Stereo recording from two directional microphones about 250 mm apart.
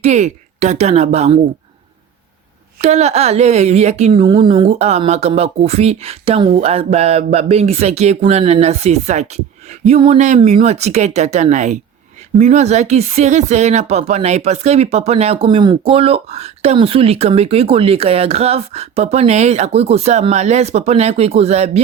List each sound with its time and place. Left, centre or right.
0.0 s speech: right
2.8 s speech: right